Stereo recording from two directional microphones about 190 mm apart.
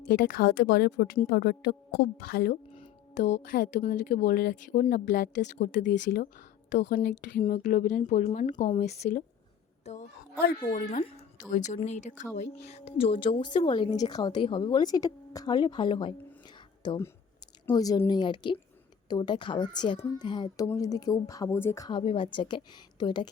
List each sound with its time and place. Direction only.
0.1 s speech: 50° left (ahead or behind)
3.2 s speech: 40° left (ahead or behind)
3.9 s a woman's voice: 55° left (ahead or behind); by 23.3 s 25° left (ahead or behind)